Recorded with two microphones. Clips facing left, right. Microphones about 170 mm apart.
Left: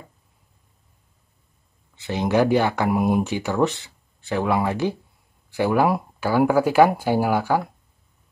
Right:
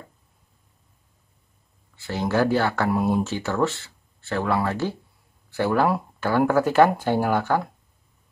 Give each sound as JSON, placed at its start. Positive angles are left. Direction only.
{"t": 2.0, "sound": "speech", "side_deg": 20}